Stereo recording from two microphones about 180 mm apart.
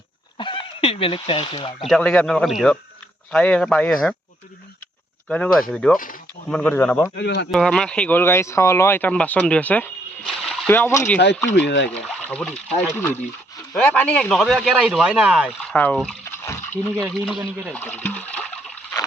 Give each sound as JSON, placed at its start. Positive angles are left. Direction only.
{"t": 0.3, "sound": "speech", "side_deg": 30}
{"t": 1.8, "sound": "speech", "side_deg": 5}
{"t": 5.3, "sound": "speech", "side_deg": 5}
{"t": 7.2, "sound": "speech", "side_deg": 70}
{"t": 7.5, "sound": "speech", "side_deg": 0}
{"t": 10.2, "sound": "splash", "side_deg": 0}
{"t": 10.7, "sound": "speech", "side_deg": 10}
{"t": 11.5, "sound": "speech", "side_deg": 75}
{"t": 12.3, "sound": "speech", "side_deg": 5}
{"t": 15.7, "sound": "speech", "side_deg": 10}
{"t": 16.5, "sound": "a sound", "side_deg": 10}
{"t": 17.0, "sound": "speech", "side_deg": 0}
{"t": 17.4, "sound": "speech", "side_deg": -15}
{"t": 17.7, "sound": "speech", "side_deg": 10}